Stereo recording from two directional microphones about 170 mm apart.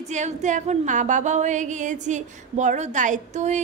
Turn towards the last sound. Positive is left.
turn(degrees=-45)  # may be behind; listen again after turning